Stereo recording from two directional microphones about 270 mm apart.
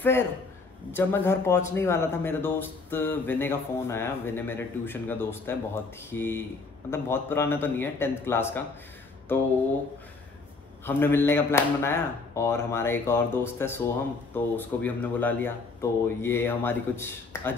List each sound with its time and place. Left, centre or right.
0.9 s speech: centre
10.9 s speech: centre